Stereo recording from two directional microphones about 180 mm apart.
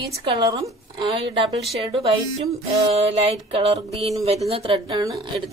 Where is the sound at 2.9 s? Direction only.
35° right (ahead or behind).